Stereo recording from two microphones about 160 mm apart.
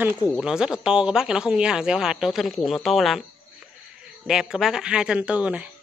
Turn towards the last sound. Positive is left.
turn(degrees=-5)  # may be behind; listen again after turning